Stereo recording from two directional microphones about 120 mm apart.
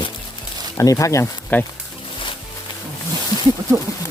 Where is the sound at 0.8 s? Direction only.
25° left (ahead or behind).